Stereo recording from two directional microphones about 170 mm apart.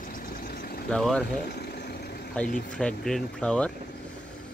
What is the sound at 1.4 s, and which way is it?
Vehicle, 70° left (ahead or behind).